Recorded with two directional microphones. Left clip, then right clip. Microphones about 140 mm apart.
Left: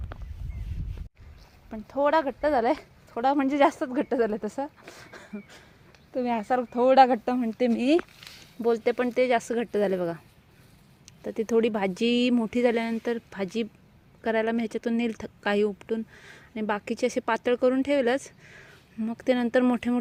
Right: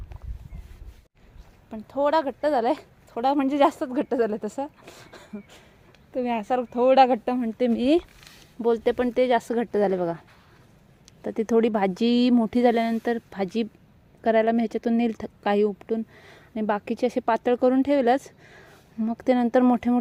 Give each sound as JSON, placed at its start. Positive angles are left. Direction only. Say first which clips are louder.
{"t": 1.7, "sound": "speech", "louder": "right 1 dB", "side_deg": 0}
{"t": 11.0, "sound": "speech", "louder": "right 2 dB", "side_deg": -30}